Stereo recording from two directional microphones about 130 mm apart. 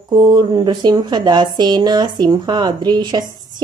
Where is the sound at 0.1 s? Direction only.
35° right (ahead or behind).